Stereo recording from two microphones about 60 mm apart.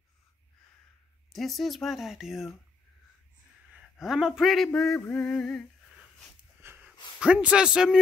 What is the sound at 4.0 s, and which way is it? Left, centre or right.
Speech, centre.